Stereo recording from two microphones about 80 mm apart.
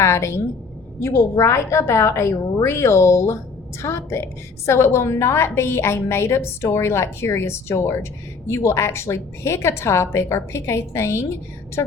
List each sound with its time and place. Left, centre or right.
0.0 s a woman's voice: left
11.8 s a woman's voice: left